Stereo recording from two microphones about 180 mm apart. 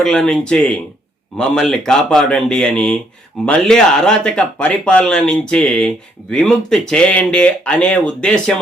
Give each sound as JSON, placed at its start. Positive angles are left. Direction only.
{"t": 0.0, "sound": "speech", "side_deg": 5}